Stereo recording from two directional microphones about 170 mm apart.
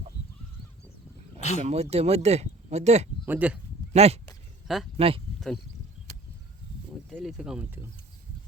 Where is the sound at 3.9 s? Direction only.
40° right (ahead or behind).